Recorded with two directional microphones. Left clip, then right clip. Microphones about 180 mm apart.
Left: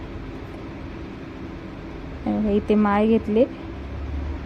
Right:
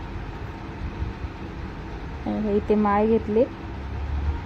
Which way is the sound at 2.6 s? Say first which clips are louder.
Even; 20° left (ahead or behind).